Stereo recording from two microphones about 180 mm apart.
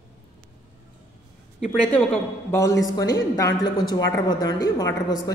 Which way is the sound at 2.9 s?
20° left (ahead or behind).